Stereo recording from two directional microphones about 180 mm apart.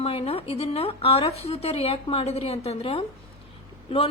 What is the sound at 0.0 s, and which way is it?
A woman's voice, 35° left (ahead or behind).